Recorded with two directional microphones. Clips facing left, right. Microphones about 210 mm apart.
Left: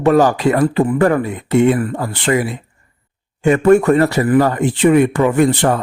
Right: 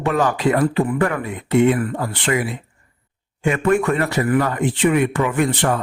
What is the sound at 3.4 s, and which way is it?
A man's voice, 40° left (ahead or behind).